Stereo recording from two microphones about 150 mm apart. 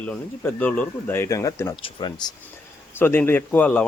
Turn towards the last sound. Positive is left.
turn(degrees=10)  # may be behind; listen again after turning